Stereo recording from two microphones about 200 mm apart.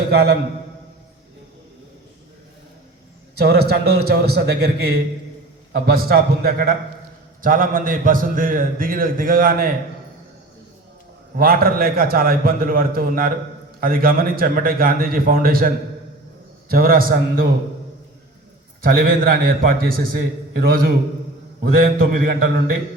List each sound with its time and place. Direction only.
0.1 s a man's voice: 55° right (ahead or behind)
3.3 s a man's voice: 55° right (ahead or behind)
11.3 s a man's voice: 45° right (ahead or behind)
18.8 s a man's voice: 45° right (ahead or behind)